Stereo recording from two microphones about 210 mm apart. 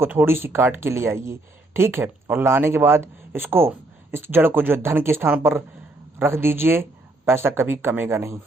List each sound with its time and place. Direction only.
0.0 s speech: 10° right (ahead or behind)